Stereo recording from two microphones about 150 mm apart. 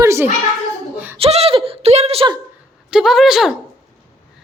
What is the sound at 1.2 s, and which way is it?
Speech, 40° right (ahead or behind).